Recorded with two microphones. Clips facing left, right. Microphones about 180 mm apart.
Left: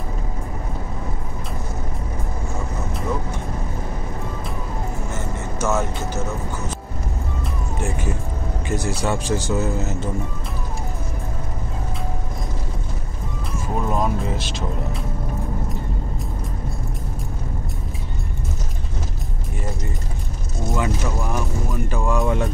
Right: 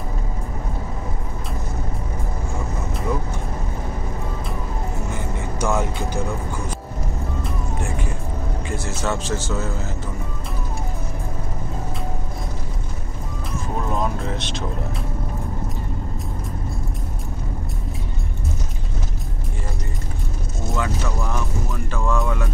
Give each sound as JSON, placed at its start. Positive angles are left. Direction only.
{"t": 5.1, "sound": "vehicle", "side_deg": -15}
{"t": 8.8, "sound": "speech", "side_deg": 15}
{"t": 13.9, "sound": "music", "side_deg": 5}
{"t": 20.7, "sound": "music", "side_deg": 15}